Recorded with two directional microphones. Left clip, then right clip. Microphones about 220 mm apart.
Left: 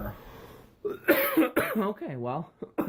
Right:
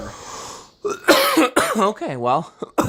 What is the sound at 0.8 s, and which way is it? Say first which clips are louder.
Speech: right 10 dB; 40° right (ahead or behind).